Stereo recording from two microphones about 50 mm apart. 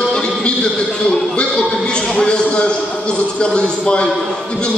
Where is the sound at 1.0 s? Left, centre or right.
Centre.